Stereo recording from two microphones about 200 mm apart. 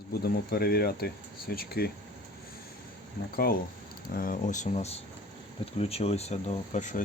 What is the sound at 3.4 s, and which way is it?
Speech, 45° left (ahead or behind).